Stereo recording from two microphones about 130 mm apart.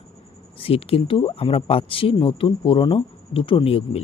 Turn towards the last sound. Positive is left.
turn(degrees=45)  # may be behind; listen again after turning